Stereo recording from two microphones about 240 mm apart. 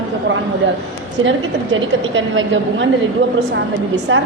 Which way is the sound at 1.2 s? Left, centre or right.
Right.